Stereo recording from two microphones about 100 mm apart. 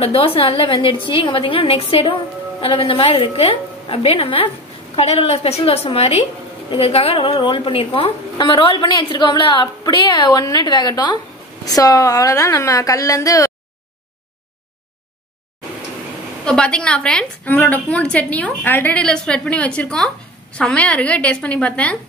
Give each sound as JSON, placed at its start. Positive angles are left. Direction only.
{"t": 0.0, "sound": "a woman's voice", "side_deg": 75}
{"t": 4.9, "sound": "a woman's voice", "side_deg": 85}
{"t": 6.7, "sound": "a woman's voice", "side_deg": 70}
{"t": 7.2, "sound": "a woman's voice", "side_deg": 55}
{"t": 11.6, "sound": "a woman's voice", "side_deg": 35}
{"t": 16.4, "sound": "a woman's voice", "side_deg": 10}